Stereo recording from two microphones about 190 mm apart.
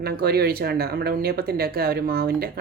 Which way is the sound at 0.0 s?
55° right (ahead or behind).